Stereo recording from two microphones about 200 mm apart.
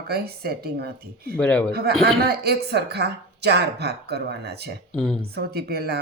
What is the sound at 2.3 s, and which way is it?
A woman's voice, 55° right (ahead or behind).